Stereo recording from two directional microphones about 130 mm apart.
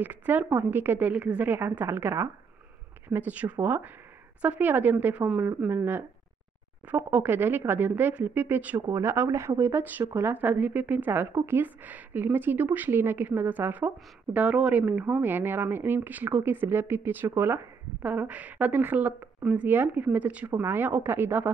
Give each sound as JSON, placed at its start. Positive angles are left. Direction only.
{"t": 0.0, "sound": "speech", "side_deg": -15}